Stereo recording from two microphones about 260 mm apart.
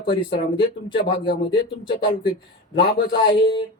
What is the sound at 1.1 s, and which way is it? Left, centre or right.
Speech, left.